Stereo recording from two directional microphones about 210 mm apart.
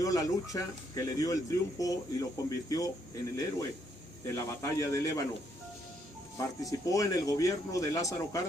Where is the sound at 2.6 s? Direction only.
15° left (ahead or behind).